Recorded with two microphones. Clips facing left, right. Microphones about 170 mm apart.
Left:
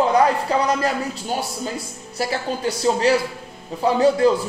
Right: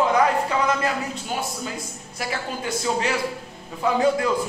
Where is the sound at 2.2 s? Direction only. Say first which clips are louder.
Left 5 dB; 35° left (ahead or behind).